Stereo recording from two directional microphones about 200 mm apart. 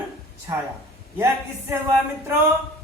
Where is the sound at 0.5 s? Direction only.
10° right (ahead or behind).